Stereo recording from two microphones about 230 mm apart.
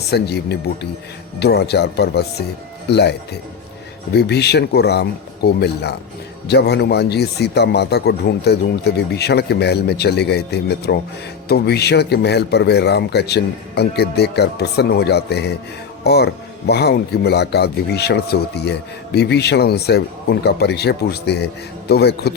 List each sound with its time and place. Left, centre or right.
0.1 s speech: left